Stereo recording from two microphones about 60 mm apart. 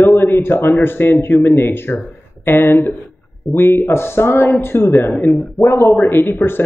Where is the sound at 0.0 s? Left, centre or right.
Left.